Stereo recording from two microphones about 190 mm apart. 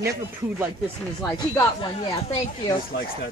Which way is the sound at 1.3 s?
20° left (ahead or behind).